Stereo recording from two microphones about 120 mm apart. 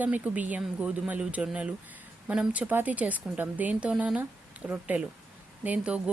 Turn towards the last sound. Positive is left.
turn(degrees=-10)  # may be behind; listen again after turning